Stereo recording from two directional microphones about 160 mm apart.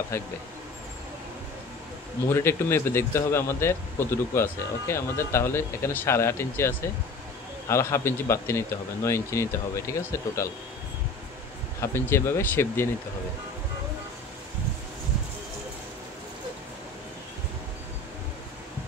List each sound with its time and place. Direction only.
0.1 s speech: 15° left (ahead or behind)
2.2 s speech: 15° left (ahead or behind)
11.8 s speech: 15° left (ahead or behind)